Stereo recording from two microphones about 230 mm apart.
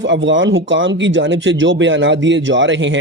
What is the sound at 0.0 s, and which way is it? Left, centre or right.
A man's voice, right.